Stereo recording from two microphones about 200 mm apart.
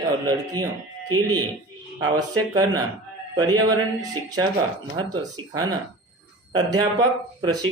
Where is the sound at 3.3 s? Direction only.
20° right (ahead or behind).